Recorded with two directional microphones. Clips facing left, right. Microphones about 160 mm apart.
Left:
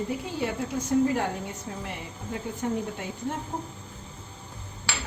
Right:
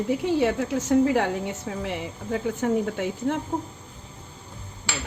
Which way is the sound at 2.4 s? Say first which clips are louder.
Right 6 dB; 90° right.